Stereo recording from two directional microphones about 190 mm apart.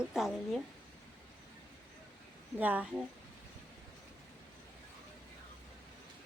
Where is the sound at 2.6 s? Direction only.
10° right (ahead or behind).